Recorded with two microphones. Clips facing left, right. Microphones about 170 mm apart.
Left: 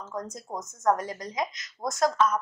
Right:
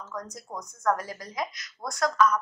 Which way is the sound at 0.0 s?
25° left (ahead or behind).